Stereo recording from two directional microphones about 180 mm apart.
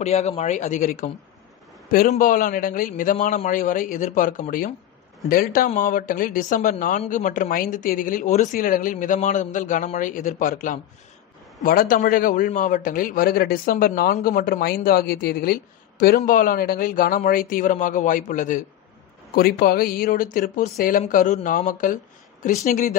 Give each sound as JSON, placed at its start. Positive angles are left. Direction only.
{"t": 0.0, "sound": "a woman's voice", "side_deg": 35}